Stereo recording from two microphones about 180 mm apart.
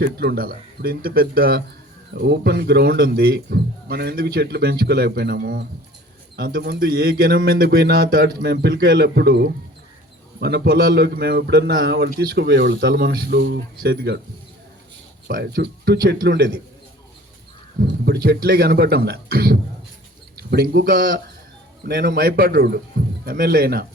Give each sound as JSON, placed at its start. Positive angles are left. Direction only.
{"t": 0.0, "sound": "a man's voice", "side_deg": -60}
{"t": 15.3, "sound": "a man's voice", "side_deg": -60}
{"t": 17.7, "sound": "a man's voice", "side_deg": -60}